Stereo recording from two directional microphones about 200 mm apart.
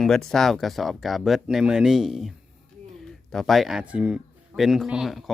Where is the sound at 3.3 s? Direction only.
Centre (ahead or behind).